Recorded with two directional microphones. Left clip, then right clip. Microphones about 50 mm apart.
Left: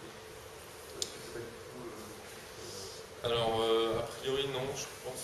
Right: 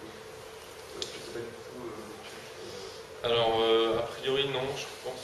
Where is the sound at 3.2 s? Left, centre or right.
Centre.